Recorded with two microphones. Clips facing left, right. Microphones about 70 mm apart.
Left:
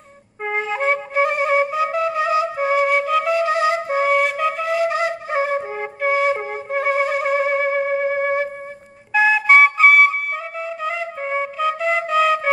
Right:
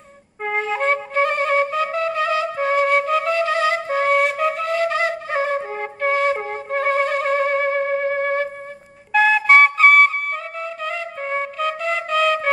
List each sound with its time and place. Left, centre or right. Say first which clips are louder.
0.4 s flute: even; centre
3.3 s flute: left 1 dB; left
4.0 s flute: right 1 dB; centre
4.7 s flute: even; centre
5.5 s flute: left 1 dB; centre